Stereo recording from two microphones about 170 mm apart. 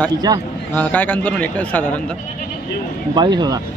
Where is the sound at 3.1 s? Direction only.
25° right (ahead or behind).